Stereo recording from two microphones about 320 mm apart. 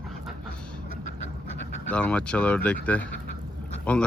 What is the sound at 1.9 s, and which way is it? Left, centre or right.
Speech, centre.